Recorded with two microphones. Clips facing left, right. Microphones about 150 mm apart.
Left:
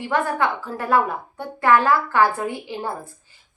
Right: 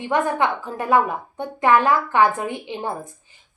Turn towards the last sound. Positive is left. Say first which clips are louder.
# right 1 dB
turn(degrees=-20)  # may be behind; listen again after turning